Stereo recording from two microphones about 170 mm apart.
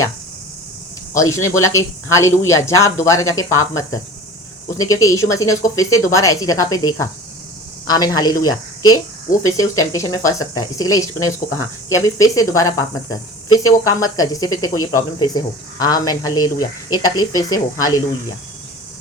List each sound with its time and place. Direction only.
1.1 s speech: 20° left (ahead or behind)
4.8 s speech: 20° left (ahead or behind)
9.3 s speech: 50° left (ahead or behind)
9.7 s speech: 20° left (ahead or behind)